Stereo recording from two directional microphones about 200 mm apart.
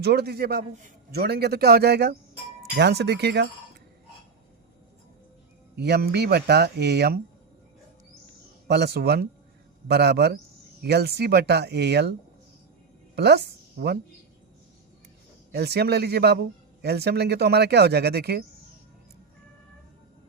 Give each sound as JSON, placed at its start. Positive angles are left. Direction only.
{"t": 0.0, "sound": "a man's voice", "side_deg": -55}
{"t": 5.7, "sound": "speech", "side_deg": -55}
{"t": 8.6, "sound": "speech", "side_deg": -55}
{"t": 13.1, "sound": "a woman's voice", "side_deg": -55}
{"t": 15.5, "sound": "speech", "side_deg": -55}